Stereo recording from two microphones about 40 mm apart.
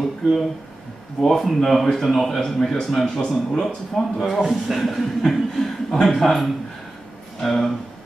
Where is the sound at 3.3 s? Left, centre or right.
Left.